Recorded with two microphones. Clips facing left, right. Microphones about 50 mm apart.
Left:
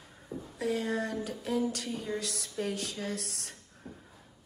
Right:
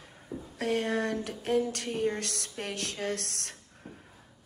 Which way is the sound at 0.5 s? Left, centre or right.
Right.